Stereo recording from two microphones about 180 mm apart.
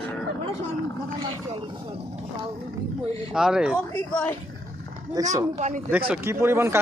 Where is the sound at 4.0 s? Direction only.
10° left (ahead or behind).